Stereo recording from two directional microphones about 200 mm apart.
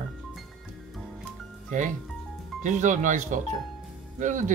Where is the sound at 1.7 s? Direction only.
40° right (ahead or behind).